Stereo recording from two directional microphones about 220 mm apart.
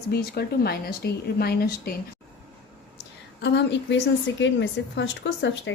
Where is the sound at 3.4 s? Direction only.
55° left (ahead or behind).